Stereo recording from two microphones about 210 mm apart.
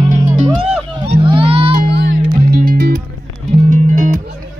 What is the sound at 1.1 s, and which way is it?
Music, 25° right (ahead or behind).